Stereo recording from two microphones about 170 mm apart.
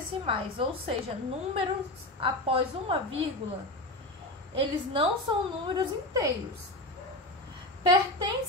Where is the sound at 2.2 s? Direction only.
30° right (ahead or behind).